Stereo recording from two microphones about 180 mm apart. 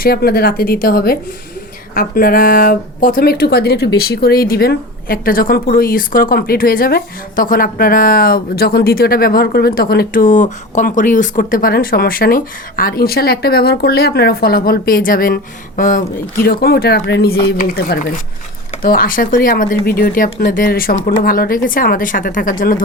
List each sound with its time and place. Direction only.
0.0 s speech: 60° left (ahead or behind)